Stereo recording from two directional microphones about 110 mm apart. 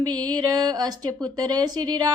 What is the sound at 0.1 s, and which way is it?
Speech, 40° right (ahead or behind).